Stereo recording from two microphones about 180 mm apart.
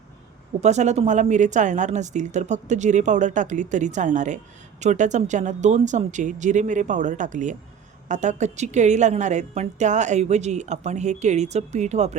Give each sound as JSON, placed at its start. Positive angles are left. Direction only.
{"t": 0.6, "sound": "a woman's voice", "side_deg": -40}